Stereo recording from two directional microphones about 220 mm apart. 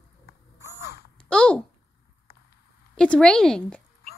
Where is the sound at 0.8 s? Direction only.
50° left (ahead or behind).